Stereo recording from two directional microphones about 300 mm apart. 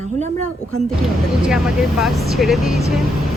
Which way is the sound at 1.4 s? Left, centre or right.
Centre.